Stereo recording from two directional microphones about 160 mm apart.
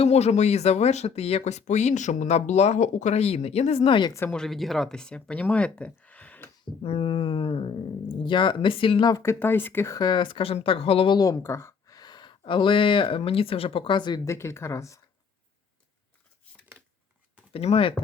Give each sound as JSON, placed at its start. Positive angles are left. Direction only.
{"t": 0.0, "sound": "speech", "side_deg": 40}
{"t": 4.3, "sound": "speech", "side_deg": 5}
{"t": 6.8, "sound": "speech", "side_deg": 35}
{"t": 14.3, "sound": "speech", "side_deg": 15}
{"t": 17.5, "sound": "speech", "side_deg": 40}